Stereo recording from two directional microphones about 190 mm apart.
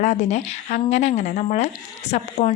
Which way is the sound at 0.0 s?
35° left (ahead or behind).